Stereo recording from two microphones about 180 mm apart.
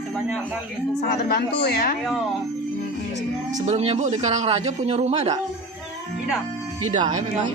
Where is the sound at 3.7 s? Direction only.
40° right (ahead or behind).